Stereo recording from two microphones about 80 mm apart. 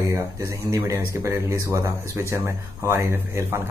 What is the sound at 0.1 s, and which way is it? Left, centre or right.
Speech, right.